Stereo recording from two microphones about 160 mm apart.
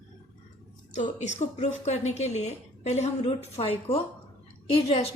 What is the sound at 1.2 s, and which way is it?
A woman's voice, 45° left (ahead or behind).